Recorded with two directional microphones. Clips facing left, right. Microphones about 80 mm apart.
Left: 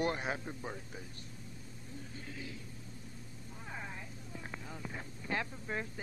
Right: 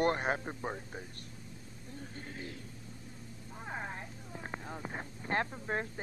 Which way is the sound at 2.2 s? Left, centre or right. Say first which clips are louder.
Right 2 dB; right.